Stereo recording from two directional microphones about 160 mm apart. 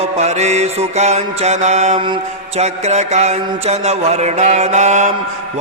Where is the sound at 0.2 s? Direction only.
45° right (ahead or behind).